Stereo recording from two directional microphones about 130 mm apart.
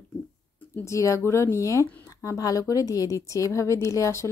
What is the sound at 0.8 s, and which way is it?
A woman's voice, 25° left (ahead or behind).